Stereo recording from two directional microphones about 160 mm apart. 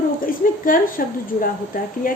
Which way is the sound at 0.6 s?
60° left (ahead or behind).